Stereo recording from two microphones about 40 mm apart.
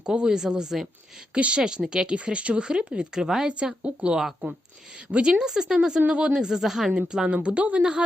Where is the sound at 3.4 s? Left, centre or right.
Right.